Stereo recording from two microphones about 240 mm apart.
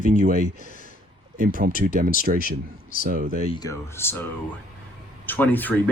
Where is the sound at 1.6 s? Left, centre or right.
Right.